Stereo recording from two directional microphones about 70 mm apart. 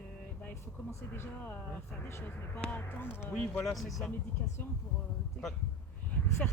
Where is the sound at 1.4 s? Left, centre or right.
Left.